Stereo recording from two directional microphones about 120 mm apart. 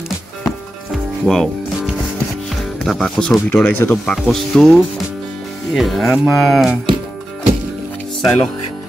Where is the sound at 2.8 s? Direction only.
5° left (ahead or behind).